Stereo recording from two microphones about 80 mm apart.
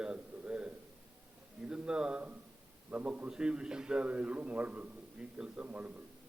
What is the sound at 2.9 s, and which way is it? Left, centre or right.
A man's voice, centre.